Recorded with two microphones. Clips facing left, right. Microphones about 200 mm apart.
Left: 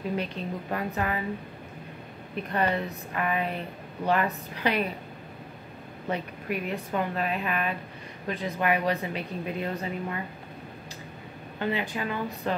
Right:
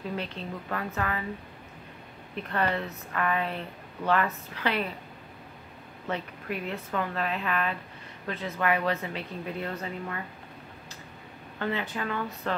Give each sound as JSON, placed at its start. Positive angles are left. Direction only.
{"t": 0.1, "sound": "a woman's voice", "side_deg": 15}
{"t": 2.3, "sound": "a woman's voice", "side_deg": 15}
{"t": 6.0, "sound": "a woman's voice", "side_deg": 15}
{"t": 11.6, "sound": "a woman's voice", "side_deg": 15}